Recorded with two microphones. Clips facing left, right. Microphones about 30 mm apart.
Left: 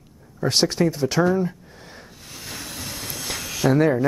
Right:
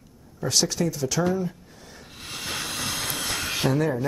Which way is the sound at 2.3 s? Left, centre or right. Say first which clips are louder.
Right 5 dB; right.